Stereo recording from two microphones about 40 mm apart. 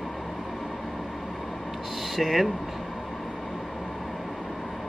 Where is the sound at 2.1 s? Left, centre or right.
Centre.